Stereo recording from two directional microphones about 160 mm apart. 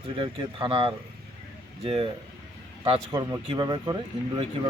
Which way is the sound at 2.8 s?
35° right (ahead or behind).